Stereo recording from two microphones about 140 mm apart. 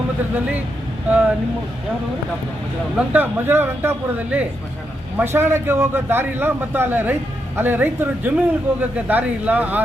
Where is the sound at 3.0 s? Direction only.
15° right (ahead or behind).